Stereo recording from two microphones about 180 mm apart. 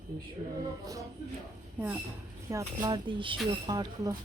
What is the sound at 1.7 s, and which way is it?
Speech, 10° right (ahead or behind).